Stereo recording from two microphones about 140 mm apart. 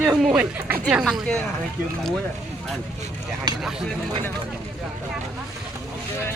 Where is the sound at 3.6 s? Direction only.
Centre (ahead or behind).